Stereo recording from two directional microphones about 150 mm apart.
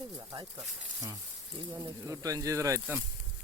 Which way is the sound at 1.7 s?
20° right (ahead or behind).